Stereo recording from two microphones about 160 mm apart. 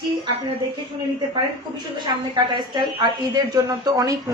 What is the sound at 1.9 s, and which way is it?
A woman's voice, 25° right (ahead or behind).